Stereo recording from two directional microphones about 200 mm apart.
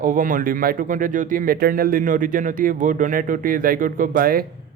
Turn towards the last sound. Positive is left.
turn(degrees=-45)  # may be behind; listen again after turning